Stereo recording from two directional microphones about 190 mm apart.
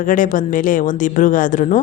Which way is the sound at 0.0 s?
45° left (ahead or behind).